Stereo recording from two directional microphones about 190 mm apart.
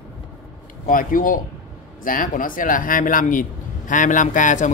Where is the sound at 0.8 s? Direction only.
45° left (ahead or behind).